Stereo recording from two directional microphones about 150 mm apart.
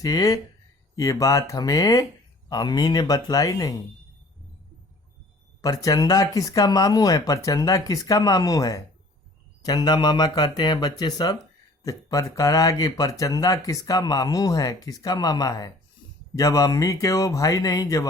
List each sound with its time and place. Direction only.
0.0 s speech: 25° left (ahead or behind)
5.6 s speech: 25° left (ahead or behind)